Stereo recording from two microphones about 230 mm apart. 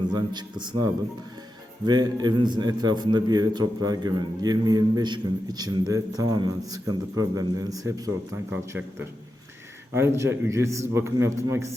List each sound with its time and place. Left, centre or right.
0.1 s a man's voice: centre
9.9 s a man's voice: centre